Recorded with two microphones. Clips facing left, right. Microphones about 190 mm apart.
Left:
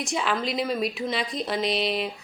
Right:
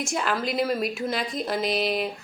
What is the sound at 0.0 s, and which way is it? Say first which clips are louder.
Speech: even; centre (ahead or behind).